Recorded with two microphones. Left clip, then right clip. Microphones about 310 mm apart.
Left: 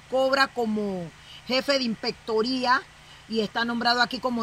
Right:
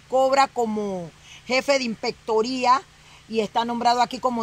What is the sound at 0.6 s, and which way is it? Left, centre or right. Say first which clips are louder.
A woman's voice: right 3 dB; centre.